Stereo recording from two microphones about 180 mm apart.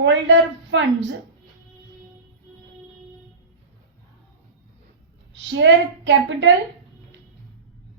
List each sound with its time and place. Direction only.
0.0 s a woman's voice: 90° right
5.5 s a woman's voice: 90° right